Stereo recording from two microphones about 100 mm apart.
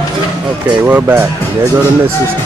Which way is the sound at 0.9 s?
20° right (ahead or behind).